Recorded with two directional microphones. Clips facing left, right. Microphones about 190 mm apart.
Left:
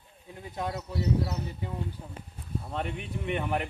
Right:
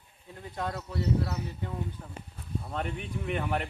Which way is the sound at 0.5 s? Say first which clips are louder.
Left 1 dB; 20° left (ahead or behind).